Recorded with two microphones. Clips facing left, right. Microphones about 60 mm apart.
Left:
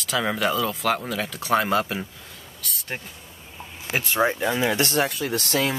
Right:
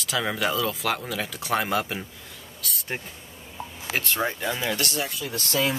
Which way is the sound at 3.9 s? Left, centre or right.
Centre.